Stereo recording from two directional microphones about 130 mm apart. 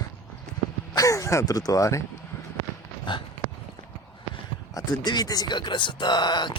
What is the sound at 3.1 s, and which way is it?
Speech, 35° left (ahead or behind).